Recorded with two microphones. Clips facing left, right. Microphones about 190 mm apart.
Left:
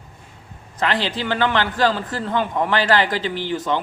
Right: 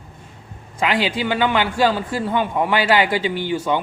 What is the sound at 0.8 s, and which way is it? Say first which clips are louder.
A man's voice: right 2 dB; 10° right (ahead or behind).